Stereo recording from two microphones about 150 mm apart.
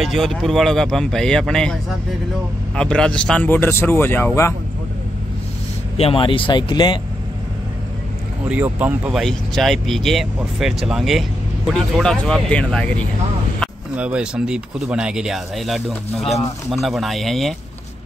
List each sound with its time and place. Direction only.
0.0 s speech: centre (ahead or behind)
5.9 s speech: 40° left (ahead or behind)
8.5 s speech: 10° right (ahead or behind)
9.2 s speech: centre (ahead or behind)
13.9 s speech: 10° right (ahead or behind)